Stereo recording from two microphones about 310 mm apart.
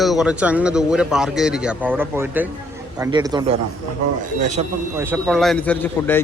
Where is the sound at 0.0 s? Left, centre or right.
Centre; by 4.6 s right.